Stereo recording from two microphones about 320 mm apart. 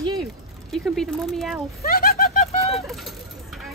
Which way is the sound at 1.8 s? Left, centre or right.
Left.